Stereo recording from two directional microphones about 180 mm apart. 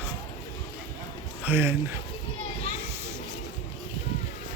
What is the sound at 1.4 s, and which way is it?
Speech, 10° right (ahead or behind).